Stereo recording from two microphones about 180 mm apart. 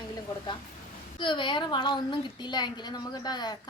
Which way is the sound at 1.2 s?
25° left (ahead or behind).